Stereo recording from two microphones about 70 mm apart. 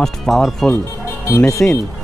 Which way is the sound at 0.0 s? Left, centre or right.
Centre.